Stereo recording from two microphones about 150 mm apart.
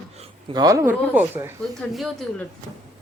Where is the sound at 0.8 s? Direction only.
10° right (ahead or behind).